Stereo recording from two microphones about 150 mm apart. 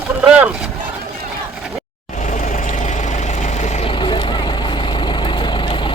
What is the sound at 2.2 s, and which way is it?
Vehicle, 55° left (ahead or behind).